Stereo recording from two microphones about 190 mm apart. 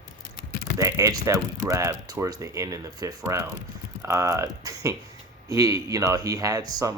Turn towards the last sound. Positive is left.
turn(degrees=-20)  # may be behind; listen again after turning